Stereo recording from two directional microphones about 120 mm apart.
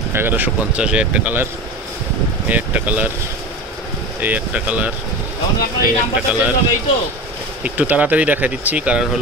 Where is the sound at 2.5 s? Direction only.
10° right (ahead or behind).